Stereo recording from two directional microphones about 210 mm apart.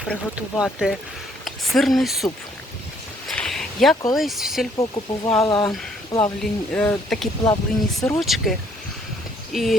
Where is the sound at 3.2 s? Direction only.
Centre (ahead or behind).